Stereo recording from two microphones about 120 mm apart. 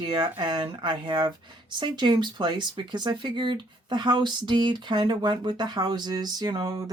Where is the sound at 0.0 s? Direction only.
40° right (ahead or behind).